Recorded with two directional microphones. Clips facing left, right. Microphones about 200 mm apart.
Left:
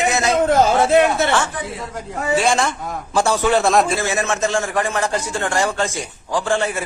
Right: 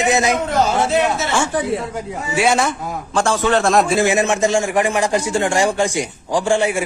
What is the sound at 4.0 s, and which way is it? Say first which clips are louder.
A man's voice: right 5 dB; 15° right (ahead or behind).